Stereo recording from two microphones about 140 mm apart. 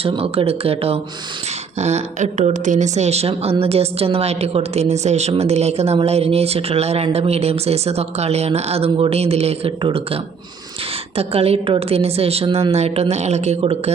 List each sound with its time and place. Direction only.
0.0 s a woman's voice: 45° right (ahead or behind)
11.2 s a woman's voice: 45° right (ahead or behind)